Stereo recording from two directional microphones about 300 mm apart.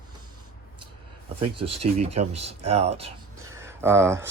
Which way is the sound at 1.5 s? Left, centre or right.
Centre.